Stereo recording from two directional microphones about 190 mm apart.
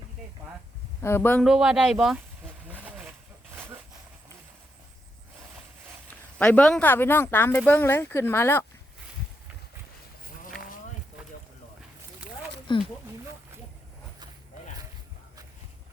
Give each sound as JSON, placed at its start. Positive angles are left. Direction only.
{"t": 1.0, "sound": "speech", "side_deg": 10}
{"t": 1.5, "sound": "speech", "side_deg": -5}
{"t": 2.6, "sound": "a sound", "side_deg": -10}
{"t": 6.4, "sound": "speech", "side_deg": 5}
{"t": 12.7, "sound": "speech", "side_deg": 25}